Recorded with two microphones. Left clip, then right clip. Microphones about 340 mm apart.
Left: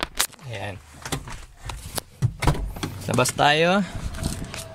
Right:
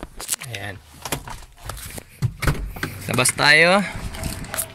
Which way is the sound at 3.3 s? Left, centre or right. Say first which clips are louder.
Right 6 dB; centre.